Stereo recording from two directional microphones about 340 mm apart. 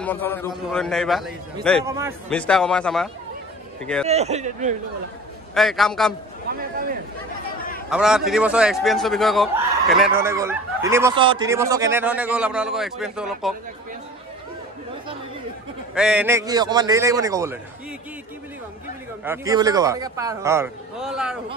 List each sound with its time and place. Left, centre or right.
0.0 s a man's voice: centre
2.2 s speech: centre
4.1 s speech: centre
5.5 s speech: centre
6.5 s speech: right
7.9 s speech: centre
15.9 s a man's voice: centre
19.2 s a man's voice: centre